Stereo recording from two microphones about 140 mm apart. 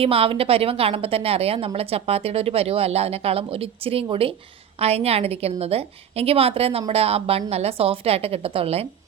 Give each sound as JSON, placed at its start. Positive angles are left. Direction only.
{"t": 0.0, "sound": "a woman's voice", "side_deg": -40}